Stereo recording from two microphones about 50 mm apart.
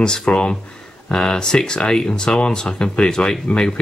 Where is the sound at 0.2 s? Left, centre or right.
Centre.